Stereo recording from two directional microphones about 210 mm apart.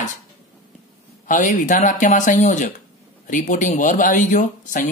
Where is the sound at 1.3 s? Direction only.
40° left (ahead or behind).